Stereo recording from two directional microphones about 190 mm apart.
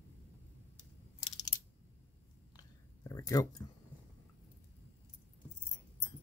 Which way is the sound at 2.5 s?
20° left (ahead or behind).